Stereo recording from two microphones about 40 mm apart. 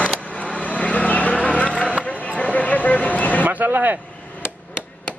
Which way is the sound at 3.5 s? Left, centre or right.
Right.